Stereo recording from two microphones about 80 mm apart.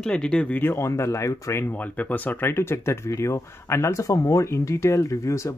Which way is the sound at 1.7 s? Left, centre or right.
Centre.